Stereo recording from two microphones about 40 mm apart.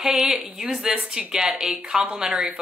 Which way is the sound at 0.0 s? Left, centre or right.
Centre.